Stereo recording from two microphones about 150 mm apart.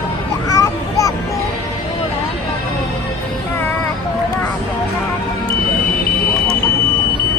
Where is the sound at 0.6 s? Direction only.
20° left (ahead or behind).